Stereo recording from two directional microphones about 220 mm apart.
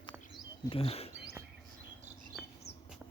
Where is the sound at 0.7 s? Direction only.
25° left (ahead or behind).